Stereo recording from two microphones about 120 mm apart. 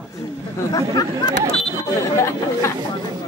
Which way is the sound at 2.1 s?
25° left (ahead or behind).